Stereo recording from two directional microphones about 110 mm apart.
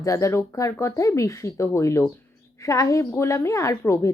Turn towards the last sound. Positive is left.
turn(degrees=25)  # may be behind; listen again after turning